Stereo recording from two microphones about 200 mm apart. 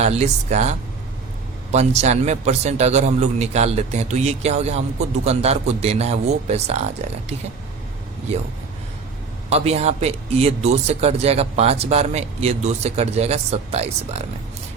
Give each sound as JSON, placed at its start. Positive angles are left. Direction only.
{"t": 0.0, "sound": "a man's voice", "side_deg": -35}
{"t": 9.5, "sound": "a man's voice", "side_deg": -30}